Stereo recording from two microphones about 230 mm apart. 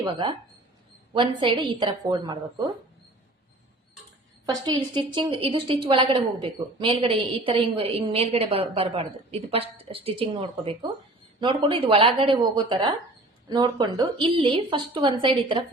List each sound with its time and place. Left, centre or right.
0.0 s a woman's voice: right
4.4 s a woman's voice: centre